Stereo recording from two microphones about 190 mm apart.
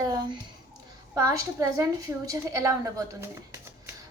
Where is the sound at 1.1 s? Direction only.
15° right (ahead or behind).